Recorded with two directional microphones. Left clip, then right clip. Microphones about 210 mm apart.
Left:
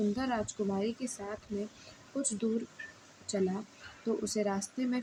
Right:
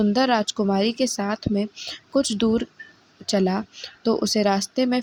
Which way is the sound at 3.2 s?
45° right (ahead or behind).